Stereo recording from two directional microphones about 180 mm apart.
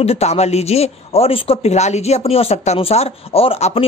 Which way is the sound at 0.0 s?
35° left (ahead or behind).